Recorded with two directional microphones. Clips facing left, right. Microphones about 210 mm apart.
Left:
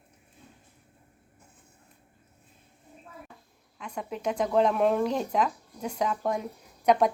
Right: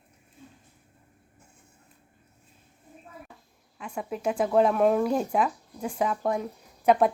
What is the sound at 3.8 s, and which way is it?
Speech, 5° right (ahead or behind).